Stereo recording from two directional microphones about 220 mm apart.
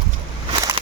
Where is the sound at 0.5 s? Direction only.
25° right (ahead or behind).